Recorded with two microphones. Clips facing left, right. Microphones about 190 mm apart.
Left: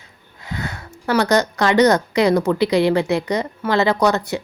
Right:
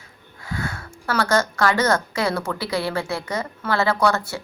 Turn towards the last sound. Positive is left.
turn(degrees=20)  # may be behind; listen again after turning